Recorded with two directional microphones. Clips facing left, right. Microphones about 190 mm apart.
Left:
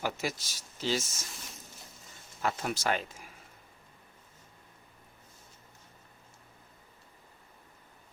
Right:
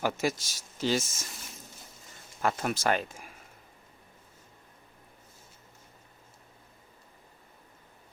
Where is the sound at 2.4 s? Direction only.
50° right (ahead or behind).